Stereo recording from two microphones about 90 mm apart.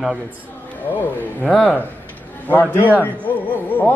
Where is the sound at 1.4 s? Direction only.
Centre (ahead or behind).